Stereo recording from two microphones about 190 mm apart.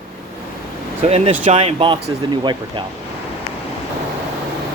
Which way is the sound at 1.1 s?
35° right (ahead or behind).